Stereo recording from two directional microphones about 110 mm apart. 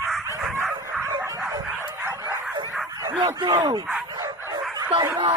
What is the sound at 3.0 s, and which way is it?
Speech, 35° right (ahead or behind).